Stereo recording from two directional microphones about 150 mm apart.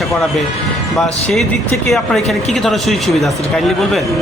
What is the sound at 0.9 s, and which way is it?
Speech, centre (ahead or behind).